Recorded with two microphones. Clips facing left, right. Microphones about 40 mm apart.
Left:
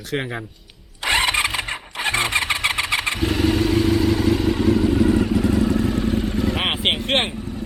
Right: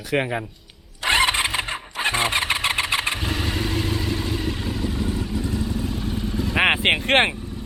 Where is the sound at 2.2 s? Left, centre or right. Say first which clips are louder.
Left 2 dB; right.